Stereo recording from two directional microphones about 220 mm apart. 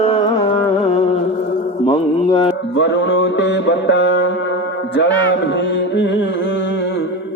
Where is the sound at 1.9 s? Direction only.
25° left (ahead or behind).